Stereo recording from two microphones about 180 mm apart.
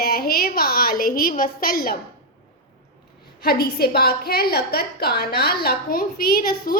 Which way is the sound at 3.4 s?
60° left (ahead or behind).